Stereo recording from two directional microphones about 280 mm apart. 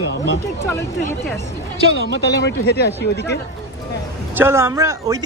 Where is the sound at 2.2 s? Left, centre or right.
Left.